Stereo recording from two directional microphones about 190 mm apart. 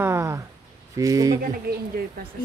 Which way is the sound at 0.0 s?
15° right (ahead or behind).